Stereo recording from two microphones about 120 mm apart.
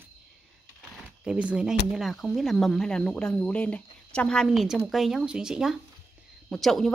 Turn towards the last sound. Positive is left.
turn(degrees=0)  # may be behind; listen again after turning